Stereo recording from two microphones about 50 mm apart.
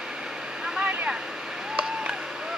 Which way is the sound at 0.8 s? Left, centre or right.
Right.